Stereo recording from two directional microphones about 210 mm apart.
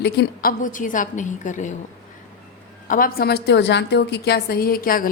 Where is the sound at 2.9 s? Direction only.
45° left (ahead or behind).